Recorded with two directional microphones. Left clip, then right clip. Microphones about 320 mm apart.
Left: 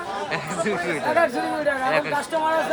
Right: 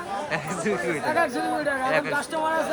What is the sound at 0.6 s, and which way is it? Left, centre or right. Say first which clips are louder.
Speech: left 3 dB; centre.